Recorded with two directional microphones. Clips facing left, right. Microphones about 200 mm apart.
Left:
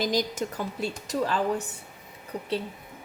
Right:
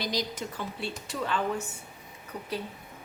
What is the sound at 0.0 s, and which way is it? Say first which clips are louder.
A woman's voice: left 5 dB; 50° left (ahead or behind).